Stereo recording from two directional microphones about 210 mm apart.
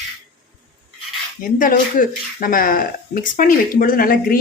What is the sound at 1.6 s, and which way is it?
Speech, 40° left (ahead or behind).